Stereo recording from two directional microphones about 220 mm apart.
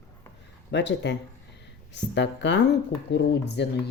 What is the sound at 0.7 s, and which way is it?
Speech, 50° left (ahead or behind).